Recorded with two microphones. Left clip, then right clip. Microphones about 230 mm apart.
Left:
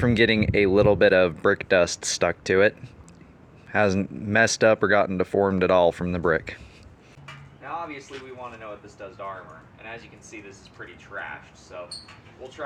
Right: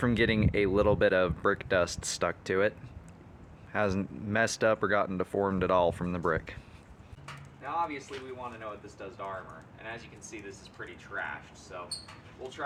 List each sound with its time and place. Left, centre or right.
0.0 s speech: centre
7.3 s a sound: centre
8.5 s speech: centre